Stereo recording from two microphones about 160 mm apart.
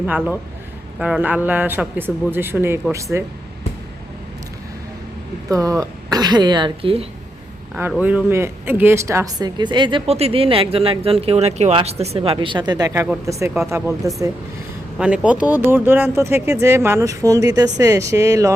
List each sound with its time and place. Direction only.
0.9 s speech: 5° right (ahead or behind)
5.5 s speech: 20° right (ahead or behind); by 7.1 s 35° right (ahead or behind)
7.8 s speech: 10° right (ahead or behind)